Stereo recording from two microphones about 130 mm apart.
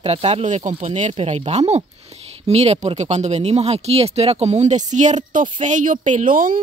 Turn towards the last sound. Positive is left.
turn(degrees=-90)